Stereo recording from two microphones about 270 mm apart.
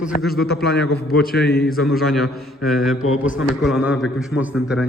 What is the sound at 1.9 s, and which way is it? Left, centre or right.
A man's voice, centre.